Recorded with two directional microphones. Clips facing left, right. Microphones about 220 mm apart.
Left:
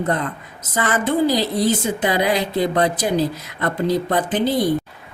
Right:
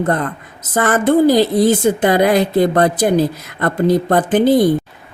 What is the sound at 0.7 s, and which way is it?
A woman's voice, 50° right (ahead or behind).